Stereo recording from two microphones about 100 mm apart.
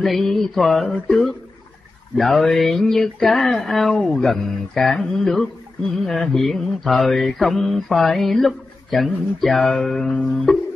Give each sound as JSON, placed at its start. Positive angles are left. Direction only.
{"t": 0.0, "sound": "mantra", "side_deg": 5}
{"t": 1.0, "sound": "speech", "side_deg": 5}
{"t": 2.1, "sound": "mantra", "side_deg": 0}